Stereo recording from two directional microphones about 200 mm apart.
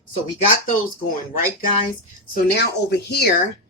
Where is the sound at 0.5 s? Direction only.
40° left (ahead or behind).